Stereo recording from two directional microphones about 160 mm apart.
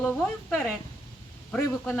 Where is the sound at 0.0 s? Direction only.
10° left (ahead or behind).